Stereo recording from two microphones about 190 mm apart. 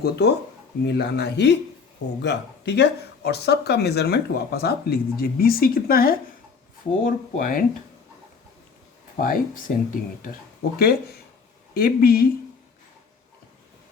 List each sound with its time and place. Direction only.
0.0 s speech: 60° left (ahead or behind)
9.2 s speech: 45° left (ahead or behind)